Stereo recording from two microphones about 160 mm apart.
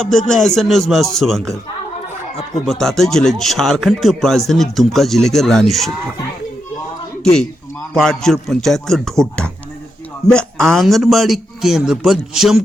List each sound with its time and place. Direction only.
0.0 s speech: 5° left (ahead or behind)
2.6 s speech: centre (ahead or behind)
7.9 s speech: 5° left (ahead or behind)